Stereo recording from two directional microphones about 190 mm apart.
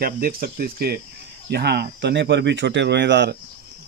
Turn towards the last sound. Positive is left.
turn(degrees=-65)  # may be behind; listen again after turning